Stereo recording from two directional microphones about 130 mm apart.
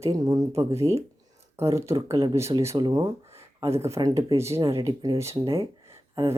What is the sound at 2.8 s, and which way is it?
Speech, 35° right (ahead or behind).